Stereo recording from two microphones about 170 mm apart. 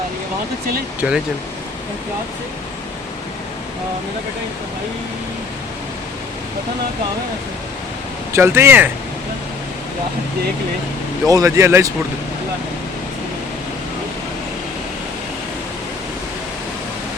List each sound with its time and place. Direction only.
1.0 s speech: 10° right (ahead or behind)
8.3 s speech: 15° right (ahead or behind)
11.3 s speech: 20° right (ahead or behind)